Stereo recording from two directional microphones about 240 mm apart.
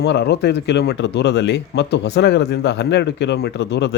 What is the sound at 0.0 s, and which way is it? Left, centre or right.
Speech, left.